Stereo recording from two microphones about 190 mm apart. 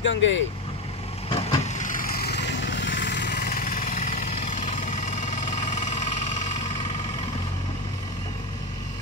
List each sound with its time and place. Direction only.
0.0 s speech: 75° left (ahead or behind)
1.3 s vehicle: 30° left (ahead or behind)
1.9 s vehicle: 50° left (ahead or behind)